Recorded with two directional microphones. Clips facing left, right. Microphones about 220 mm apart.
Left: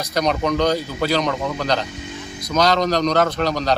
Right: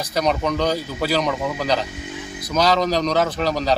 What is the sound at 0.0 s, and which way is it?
A man's voice, 5° right (ahead or behind).